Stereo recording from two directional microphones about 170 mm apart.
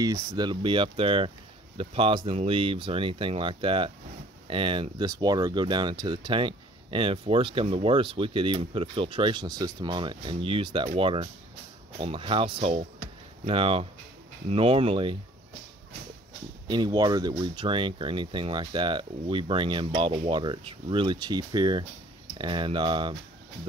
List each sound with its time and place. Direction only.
0.0 s speech: 20° right (ahead or behind)
16.6 s speech: 25° right (ahead or behind)